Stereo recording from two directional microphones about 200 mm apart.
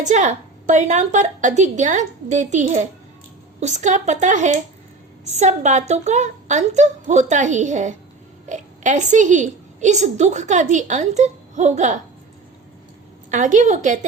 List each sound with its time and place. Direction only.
0.0 s a woman's voice: 35° right (ahead or behind)
13.3 s a woman's voice: 40° right (ahead or behind)